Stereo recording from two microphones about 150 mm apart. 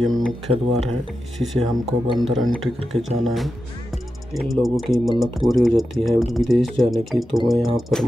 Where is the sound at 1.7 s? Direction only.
30° right (ahead or behind).